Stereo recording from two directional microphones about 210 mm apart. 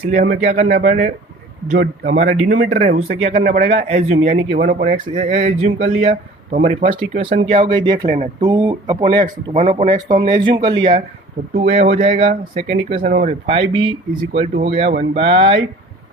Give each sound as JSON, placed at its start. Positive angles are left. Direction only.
{"t": 0.0, "sound": "a man's voice", "side_deg": -35}